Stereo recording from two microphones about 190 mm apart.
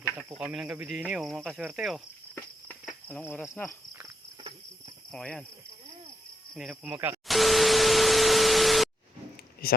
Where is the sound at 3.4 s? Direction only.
5° left (ahead or behind).